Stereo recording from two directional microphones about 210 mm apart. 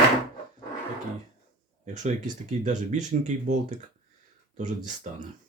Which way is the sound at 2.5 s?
35° right (ahead or behind).